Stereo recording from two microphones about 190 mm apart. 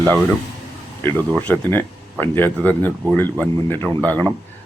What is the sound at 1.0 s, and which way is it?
Speech, 10° left (ahead or behind).